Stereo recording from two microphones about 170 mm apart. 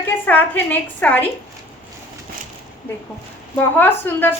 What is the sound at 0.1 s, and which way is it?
A woman's voice, 10° left (ahead or behind).